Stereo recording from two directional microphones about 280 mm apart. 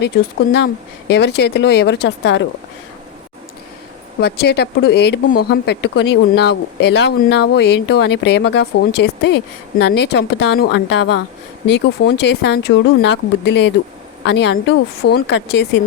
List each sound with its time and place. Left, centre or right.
0.5 s speech: left
4.2 s speech: left